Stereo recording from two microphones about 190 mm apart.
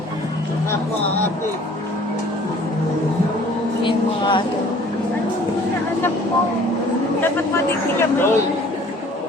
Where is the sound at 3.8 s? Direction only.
25° left (ahead or behind).